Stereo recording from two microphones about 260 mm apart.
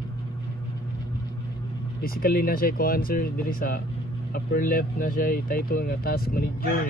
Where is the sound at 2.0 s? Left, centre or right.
Left.